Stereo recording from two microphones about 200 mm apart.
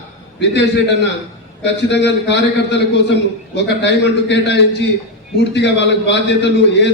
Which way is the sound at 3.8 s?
60° left (ahead or behind).